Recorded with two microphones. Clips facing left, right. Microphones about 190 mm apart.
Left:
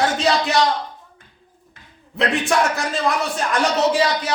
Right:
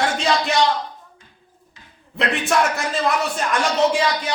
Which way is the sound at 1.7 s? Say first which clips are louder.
Right 1 dB; 55° left (ahead or behind).